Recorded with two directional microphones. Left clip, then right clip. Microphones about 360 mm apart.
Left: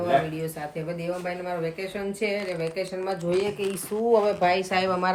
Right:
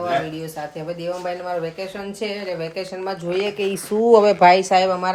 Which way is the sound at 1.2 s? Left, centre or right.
Centre.